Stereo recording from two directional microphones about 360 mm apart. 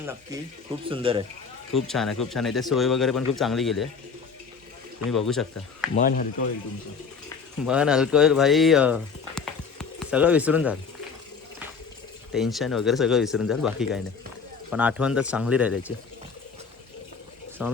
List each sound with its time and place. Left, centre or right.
0.9 s speech: centre
1.7 s speech: centre
5.1 s speech: centre
6.0 s speech: left
7.6 s speech: centre
12.3 s speech: centre
17.6 s speech: centre